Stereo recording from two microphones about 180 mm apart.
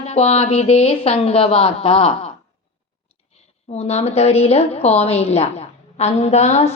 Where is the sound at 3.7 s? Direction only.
35° left (ahead or behind).